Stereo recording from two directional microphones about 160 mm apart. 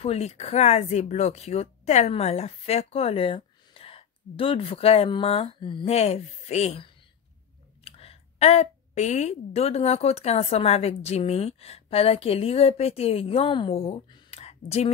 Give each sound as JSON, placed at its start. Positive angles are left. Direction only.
{"t": 0.0, "sound": "speech", "side_deg": 40}
{"t": 14.4, "sound": "whispering", "side_deg": 40}